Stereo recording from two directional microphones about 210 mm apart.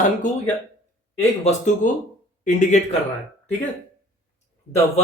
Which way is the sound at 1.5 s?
35° left (ahead or behind).